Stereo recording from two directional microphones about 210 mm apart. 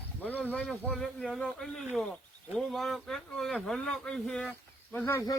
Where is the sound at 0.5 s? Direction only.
5° left (ahead or behind).